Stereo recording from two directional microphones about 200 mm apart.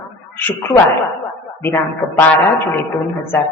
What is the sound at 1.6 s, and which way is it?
Speech, 10° left (ahead or behind).